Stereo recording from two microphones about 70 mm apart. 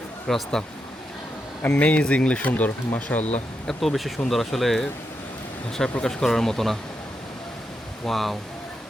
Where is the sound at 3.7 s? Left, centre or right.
Centre.